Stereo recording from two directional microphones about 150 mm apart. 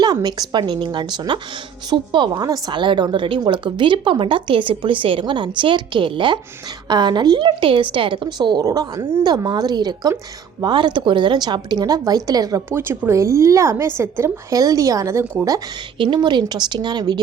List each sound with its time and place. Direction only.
0.0 s a woman's voice: 25° right (ahead or behind)
9.2 s speech: 25° right (ahead or behind)
15.5 s speech: 30° right (ahead or behind)